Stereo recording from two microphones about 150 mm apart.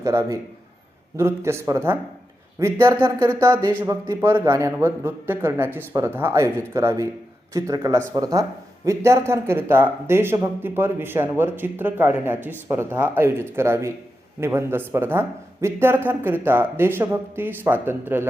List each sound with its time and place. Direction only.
0.0 s speech: 20° right (ahead or behind)